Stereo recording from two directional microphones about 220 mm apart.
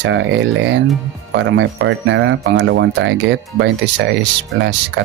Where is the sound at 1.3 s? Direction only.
55° right (ahead or behind).